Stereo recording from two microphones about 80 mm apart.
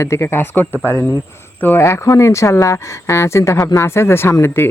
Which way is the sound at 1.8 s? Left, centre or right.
Left.